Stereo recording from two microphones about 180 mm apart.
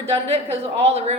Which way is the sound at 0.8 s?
35° right (ahead or behind).